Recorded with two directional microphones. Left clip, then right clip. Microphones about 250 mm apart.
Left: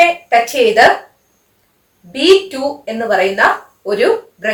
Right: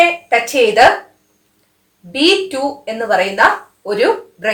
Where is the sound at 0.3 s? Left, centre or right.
Centre.